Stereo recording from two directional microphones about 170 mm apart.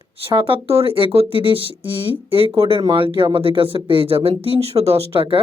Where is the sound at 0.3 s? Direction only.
30° right (ahead or behind).